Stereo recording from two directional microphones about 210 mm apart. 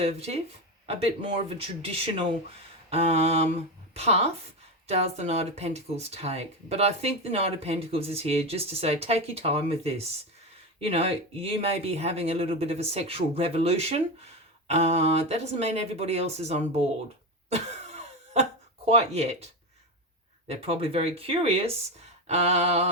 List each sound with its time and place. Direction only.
0.0 s speech: 30° right (ahead or behind)
17.5 s cough: 30° right (ahead or behind)
18.9 s speech: 30° right (ahead or behind)
20.5 s speech: 30° right (ahead or behind)